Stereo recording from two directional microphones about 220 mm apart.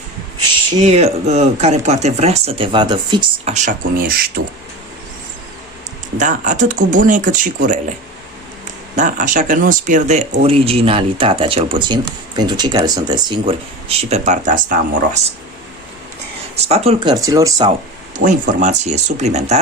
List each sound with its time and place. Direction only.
0.8 s speech: 30° right (ahead or behind)
3.5 s speech: 35° right (ahead or behind)
6.1 s speech: 35° right (ahead or behind)
9.0 s speech: 35° right (ahead or behind)
16.6 s speech: 30° right (ahead or behind)
18.2 s speech: 35° right (ahead or behind)